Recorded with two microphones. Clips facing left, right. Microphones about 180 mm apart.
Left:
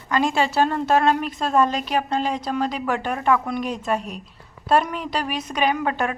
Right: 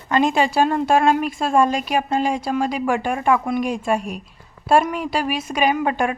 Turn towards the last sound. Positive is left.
turn(degrees=-15)  # may be behind; listen again after turning